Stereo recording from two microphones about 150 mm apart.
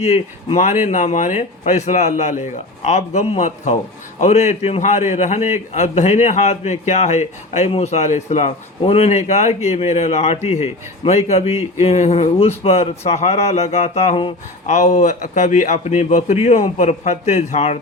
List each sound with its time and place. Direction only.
0.0 s a man's voice: 45° left (ahead or behind)
14.7 s a man's voice: 50° left (ahead or behind)